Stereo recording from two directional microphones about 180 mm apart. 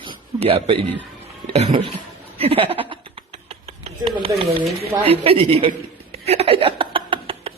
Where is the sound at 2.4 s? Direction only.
30° right (ahead or behind).